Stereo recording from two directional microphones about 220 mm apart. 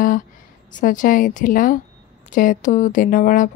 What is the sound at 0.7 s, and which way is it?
Speech, 35° left (ahead or behind).